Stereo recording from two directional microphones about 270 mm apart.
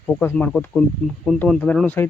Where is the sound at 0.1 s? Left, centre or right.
Centre.